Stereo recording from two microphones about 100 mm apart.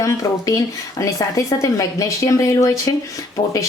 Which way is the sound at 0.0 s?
30° left (ahead or behind).